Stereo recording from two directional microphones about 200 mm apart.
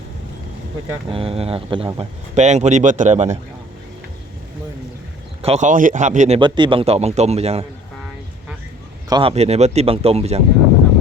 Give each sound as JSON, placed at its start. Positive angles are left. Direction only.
{"t": 1.1, "sound": "speech", "side_deg": -30}
{"t": 5.4, "sound": "speech", "side_deg": -35}
{"t": 9.0, "sound": "speech", "side_deg": -25}